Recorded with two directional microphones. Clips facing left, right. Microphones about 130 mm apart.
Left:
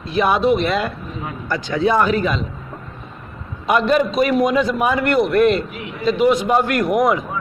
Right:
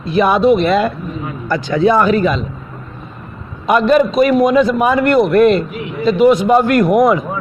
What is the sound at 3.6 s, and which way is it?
A man's voice, 45° right (ahead or behind).